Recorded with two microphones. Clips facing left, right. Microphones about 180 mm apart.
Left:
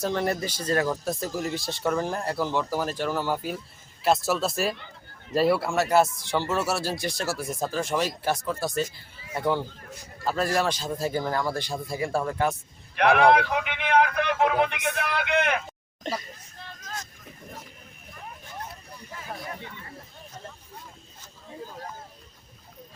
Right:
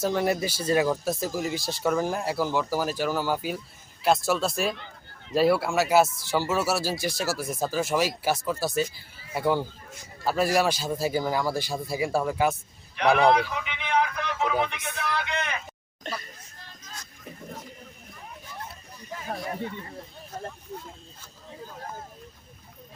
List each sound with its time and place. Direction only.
0.0 s speech: 5° right (ahead or behind)
13.0 s speech: 60° left (ahead or behind)